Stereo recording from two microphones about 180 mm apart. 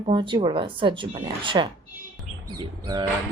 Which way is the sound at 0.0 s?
25° right (ahead or behind).